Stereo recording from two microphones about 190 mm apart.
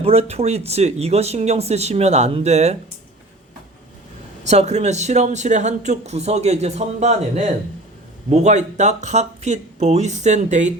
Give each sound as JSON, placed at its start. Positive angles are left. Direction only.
{"t": 0.0, "sound": "speech", "side_deg": -30}
{"t": 4.4, "sound": "speech", "side_deg": -35}